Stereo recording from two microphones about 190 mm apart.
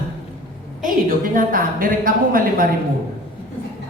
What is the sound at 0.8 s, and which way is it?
A woman's voice, 50° right (ahead or behind).